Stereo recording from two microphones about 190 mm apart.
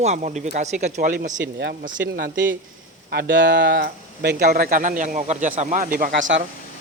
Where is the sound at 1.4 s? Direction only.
65° right (ahead or behind).